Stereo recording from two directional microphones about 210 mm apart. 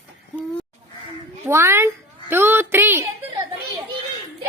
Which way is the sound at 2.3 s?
10° right (ahead or behind).